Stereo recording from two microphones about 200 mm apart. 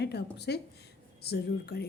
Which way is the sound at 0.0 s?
55° left (ahead or behind).